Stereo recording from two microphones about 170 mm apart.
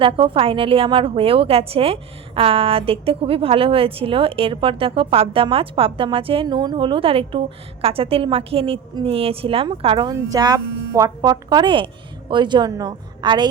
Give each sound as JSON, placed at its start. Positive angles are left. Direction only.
{"t": 0.0, "sound": "a woman's voice", "side_deg": -30}